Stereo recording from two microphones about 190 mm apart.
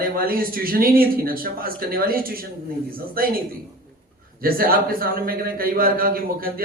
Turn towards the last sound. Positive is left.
turn(degrees=-50)  # may be behind; listen again after turning